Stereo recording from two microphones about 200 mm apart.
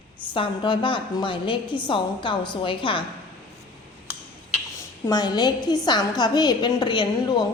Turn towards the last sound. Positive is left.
turn(degrees=20)  # may be behind; listen again after turning